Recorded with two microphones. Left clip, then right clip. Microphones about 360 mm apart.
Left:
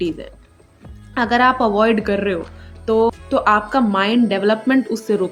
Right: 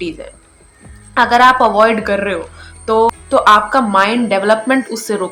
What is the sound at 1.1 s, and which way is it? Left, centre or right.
A woman's voice, left.